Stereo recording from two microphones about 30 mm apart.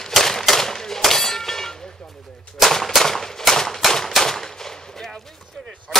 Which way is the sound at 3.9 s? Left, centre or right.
Centre.